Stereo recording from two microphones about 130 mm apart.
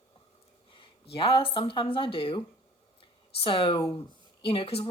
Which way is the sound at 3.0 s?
40° left (ahead or behind).